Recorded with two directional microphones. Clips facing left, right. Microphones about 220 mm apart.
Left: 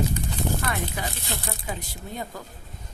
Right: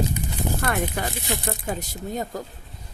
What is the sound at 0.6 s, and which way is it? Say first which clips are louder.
Speech: right 4 dB; 55° right (ahead or behind).